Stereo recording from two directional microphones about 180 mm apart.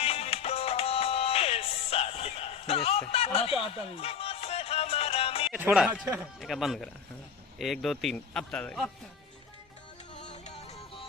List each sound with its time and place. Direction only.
0.0 s music: 35° left (ahead or behind)
5.5 s speech: 10° right (ahead or behind)
10.2 s music: 40° left (ahead or behind)